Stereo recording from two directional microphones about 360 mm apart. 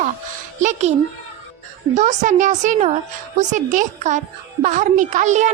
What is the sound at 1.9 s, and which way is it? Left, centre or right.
A woman's voice, centre.